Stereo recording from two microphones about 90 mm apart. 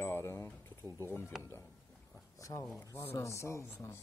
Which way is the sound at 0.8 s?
35° right (ahead or behind).